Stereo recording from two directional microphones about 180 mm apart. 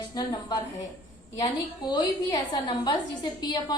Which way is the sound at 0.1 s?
20° left (ahead or behind).